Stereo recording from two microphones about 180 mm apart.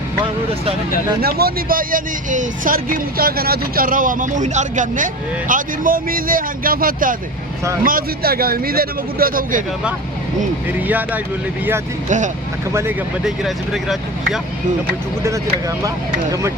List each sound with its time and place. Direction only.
1.2 s speech: 60° right (ahead or behind)
10.8 s speech: 10° right (ahead or behind)
12.0 s speech: 45° right (ahead or behind)
13.2 s speech: centre (ahead or behind)